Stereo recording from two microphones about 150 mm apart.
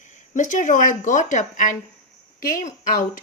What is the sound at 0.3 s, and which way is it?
A woman's voice, 55° left (ahead or behind).